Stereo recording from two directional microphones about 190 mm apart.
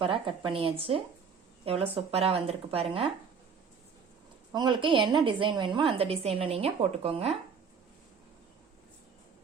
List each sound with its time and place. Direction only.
0.0 s a woman's voice: 30° right (ahead or behind)
4.5 s a woman's voice: 25° right (ahead or behind)